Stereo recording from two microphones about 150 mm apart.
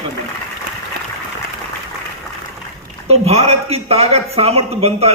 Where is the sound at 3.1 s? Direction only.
45° right (ahead or behind).